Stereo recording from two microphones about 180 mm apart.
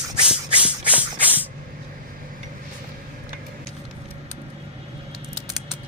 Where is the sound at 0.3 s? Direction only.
5° right (ahead or behind).